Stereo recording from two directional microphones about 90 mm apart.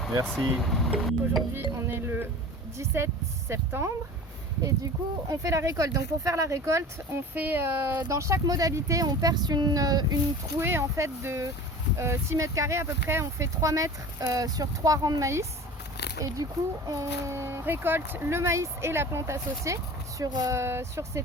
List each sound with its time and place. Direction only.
0.3 s speech: 5° left (ahead or behind)
1.9 s a sound: 25° right (ahead or behind)
2.7 s speech: 30° right (ahead or behind)
5.3 s speech: 35° right (ahead or behind)
7.1 s speech: 20° right (ahead or behind); by 10.2 s 45° right (ahead or behind)
10.6 s speech: 25° right (ahead or behind); by 20.6 s 45° right (ahead or behind)
20.6 s speech: 30° right (ahead or behind)